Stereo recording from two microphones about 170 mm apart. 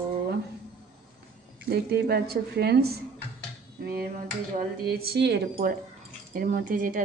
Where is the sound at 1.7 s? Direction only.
70° right (ahead or behind).